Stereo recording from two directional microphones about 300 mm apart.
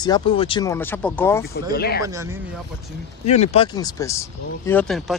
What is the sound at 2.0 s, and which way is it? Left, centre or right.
Speech, centre.